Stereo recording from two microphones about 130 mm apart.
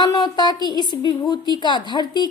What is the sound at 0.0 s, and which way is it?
A woman's voice, 30° left (ahead or behind).